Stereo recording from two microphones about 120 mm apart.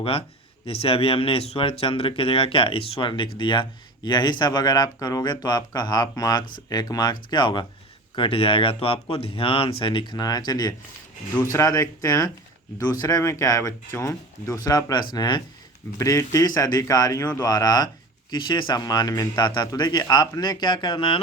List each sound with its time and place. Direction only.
0.0 s speech: 50° left (ahead or behind)
16.0 s speech: 25° left (ahead or behind); by 21.2 s 45° left (ahead or behind)